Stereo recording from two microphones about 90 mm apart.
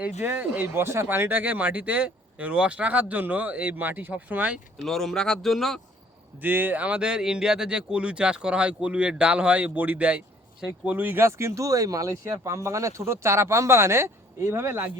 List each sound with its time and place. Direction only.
0.0 s speech: 20° right (ahead or behind)
4.9 s speech: 5° left (ahead or behind)
6.4 s speech: 20° right (ahead or behind)